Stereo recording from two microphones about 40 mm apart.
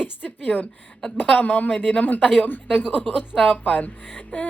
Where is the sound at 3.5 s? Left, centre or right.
Left.